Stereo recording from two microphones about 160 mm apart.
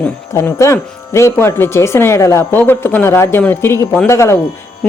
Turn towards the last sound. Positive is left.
turn(degrees=15)  # may be behind; listen again after turning